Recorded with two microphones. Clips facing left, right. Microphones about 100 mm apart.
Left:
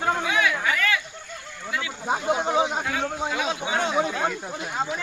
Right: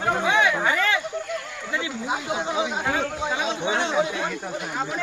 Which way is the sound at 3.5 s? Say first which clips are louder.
Right 2 dB; 30° right (ahead or behind).